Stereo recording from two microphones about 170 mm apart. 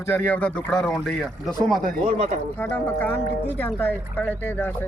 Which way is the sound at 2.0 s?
45° right (ahead or behind).